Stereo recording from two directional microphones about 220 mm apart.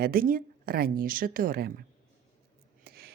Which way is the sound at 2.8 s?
45° right (ahead or behind).